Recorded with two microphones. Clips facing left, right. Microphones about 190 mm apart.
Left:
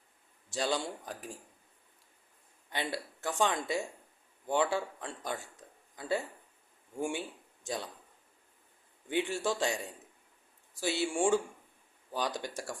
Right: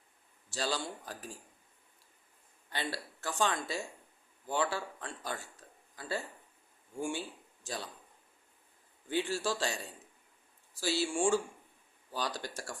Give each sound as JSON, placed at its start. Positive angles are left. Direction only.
{"t": 0.5, "sound": "speech", "side_deg": 20}
{"t": 2.6, "sound": "a man's voice", "side_deg": 20}
{"t": 9.0, "sound": "speech", "side_deg": 20}
{"t": 10.8, "sound": "speech", "side_deg": 20}